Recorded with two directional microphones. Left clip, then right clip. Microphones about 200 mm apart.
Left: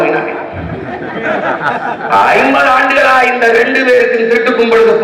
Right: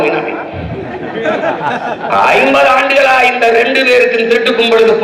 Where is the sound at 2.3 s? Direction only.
20° right (ahead or behind).